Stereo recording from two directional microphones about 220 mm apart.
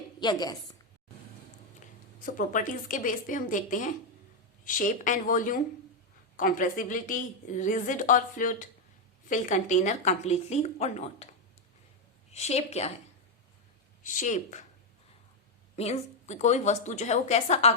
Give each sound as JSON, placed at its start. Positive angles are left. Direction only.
{"t": 0.2, "sound": "a woman's voice", "side_deg": 20}
{"t": 2.2, "sound": "a woman's voice", "side_deg": 35}
{"t": 12.3, "sound": "a woman's voice", "side_deg": 30}
{"t": 14.0, "sound": "a woman's voice", "side_deg": 35}
{"t": 15.7, "sound": "a woman's voice", "side_deg": 30}